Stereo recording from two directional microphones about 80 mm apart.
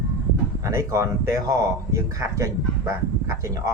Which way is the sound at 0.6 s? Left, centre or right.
Right.